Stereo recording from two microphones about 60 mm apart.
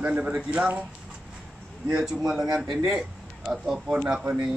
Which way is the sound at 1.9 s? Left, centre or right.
Centre.